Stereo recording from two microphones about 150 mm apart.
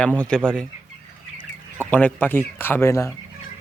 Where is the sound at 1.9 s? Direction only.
10° left (ahead or behind).